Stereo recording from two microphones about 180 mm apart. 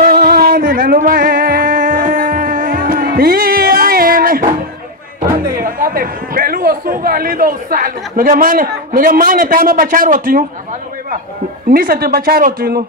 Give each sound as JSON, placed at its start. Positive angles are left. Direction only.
{"t": 0.0, "sound": "music", "side_deg": -55}
{"t": 5.6, "sound": "a man's voice", "side_deg": -50}
{"t": 11.7, "sound": "speech", "side_deg": -55}